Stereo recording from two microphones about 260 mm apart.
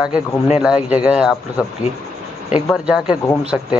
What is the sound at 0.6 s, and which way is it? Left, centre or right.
Speech, centre.